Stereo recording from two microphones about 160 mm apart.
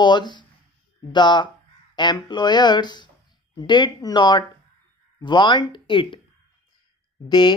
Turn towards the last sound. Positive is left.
turn(degrees=30)  # may be behind; listen again after turning